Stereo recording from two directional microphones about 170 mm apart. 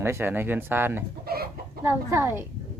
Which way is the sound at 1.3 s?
65° right (ahead or behind).